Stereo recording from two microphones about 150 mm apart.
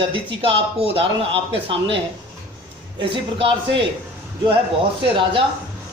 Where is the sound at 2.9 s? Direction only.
35° right (ahead or behind).